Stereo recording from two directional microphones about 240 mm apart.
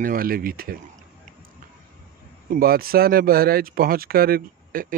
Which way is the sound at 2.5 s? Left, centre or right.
Right.